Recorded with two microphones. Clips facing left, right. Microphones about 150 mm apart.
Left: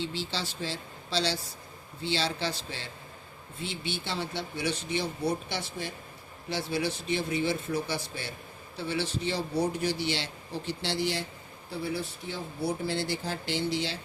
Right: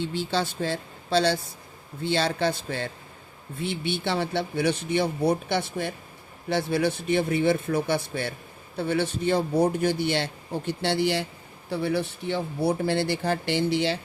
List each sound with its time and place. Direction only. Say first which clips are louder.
0.0 s speech: right 7 dB; 55° right (ahead or behind)